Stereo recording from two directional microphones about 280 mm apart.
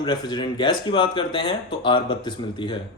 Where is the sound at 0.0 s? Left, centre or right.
Centre.